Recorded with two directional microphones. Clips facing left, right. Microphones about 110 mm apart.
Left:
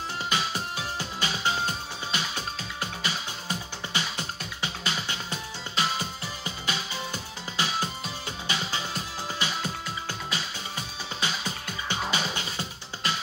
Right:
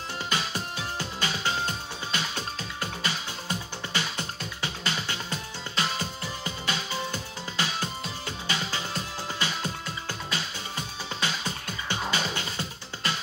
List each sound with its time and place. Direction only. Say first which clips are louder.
0.3 s music: left 1 dB; 15° left (ahead or behind)
9.4 s music: even; 15° left (ahead or behind)